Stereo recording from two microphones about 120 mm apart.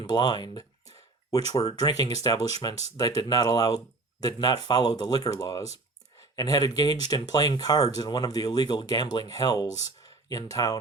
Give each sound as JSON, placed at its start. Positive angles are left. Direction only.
{"t": 0.0, "sound": "speech", "side_deg": 35}